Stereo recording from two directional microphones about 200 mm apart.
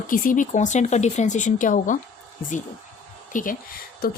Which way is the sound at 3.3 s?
40° left (ahead or behind).